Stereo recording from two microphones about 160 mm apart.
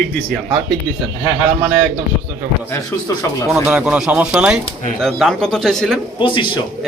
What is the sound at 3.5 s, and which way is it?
Speech, 5° right (ahead or behind).